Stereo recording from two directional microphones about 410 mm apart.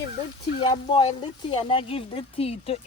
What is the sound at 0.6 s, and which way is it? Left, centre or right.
Speech, centre.